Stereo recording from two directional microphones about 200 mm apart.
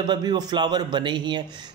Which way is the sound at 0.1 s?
20° right (ahead or behind).